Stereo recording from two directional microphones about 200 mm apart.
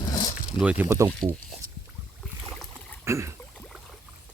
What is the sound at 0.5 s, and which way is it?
Speech, 5° right (ahead or behind).